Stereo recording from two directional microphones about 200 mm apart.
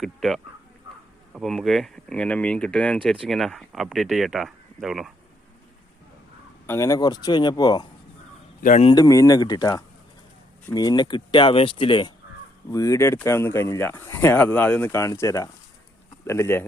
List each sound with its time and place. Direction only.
0.0 s speech: centre (ahead or behind)
6.7 s speech: 15° left (ahead or behind)
8.6 s speech: 35° left (ahead or behind)
9.0 s speech: 15° left (ahead or behind)